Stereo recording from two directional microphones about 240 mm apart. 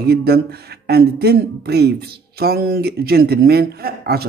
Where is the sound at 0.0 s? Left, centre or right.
Right.